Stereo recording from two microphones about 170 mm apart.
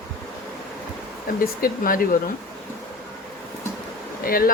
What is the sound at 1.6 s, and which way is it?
Speech, 55° left (ahead or behind).